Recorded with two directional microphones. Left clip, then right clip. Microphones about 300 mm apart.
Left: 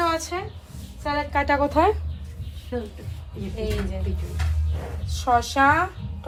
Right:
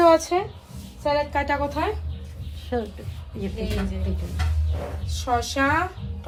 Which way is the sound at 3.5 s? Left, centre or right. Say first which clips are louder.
Left 4 dB; centre.